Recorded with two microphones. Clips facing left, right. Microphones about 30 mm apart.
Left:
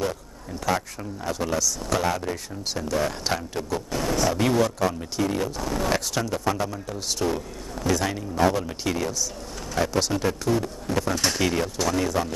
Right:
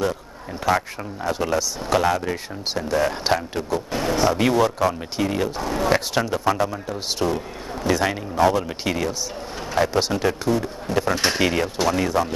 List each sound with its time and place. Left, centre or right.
0.7 s speech: right